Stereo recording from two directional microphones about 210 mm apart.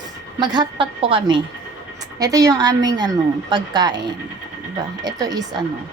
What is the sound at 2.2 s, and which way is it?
Music, 15° right (ahead or behind).